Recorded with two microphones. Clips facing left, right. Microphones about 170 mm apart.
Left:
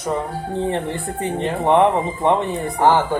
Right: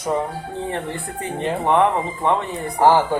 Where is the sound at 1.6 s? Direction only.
20° left (ahead or behind).